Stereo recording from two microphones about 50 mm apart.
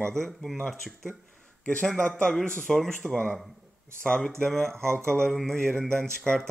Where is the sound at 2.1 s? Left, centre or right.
Centre.